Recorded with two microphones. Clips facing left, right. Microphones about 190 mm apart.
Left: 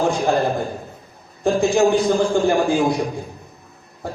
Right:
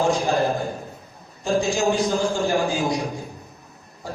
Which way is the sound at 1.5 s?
55° left (ahead or behind).